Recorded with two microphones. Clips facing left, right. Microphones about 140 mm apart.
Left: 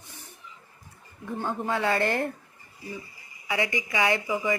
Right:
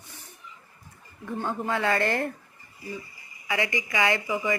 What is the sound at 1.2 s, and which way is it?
Speech, 10° left (ahead or behind).